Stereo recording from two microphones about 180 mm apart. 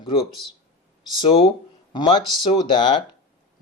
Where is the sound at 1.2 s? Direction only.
30° left (ahead or behind).